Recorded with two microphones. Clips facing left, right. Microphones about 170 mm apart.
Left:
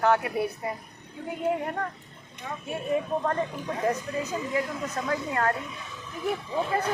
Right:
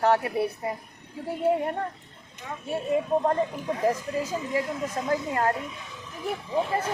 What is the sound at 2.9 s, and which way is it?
Speech, 20° right (ahead or behind).